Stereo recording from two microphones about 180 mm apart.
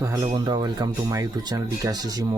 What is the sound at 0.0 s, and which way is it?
Speech, 20° right (ahead or behind).